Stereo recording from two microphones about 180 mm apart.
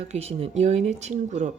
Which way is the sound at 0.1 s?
35° right (ahead or behind).